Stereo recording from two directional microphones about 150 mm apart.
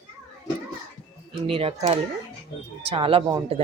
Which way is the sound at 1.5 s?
40° right (ahead or behind).